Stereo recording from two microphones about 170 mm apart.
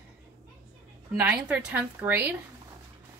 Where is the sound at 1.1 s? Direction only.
10° right (ahead or behind).